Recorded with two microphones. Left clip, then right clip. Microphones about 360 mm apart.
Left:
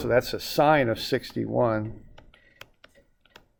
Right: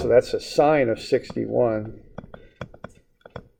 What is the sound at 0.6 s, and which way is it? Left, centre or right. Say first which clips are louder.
Speech: right 2 dB; left.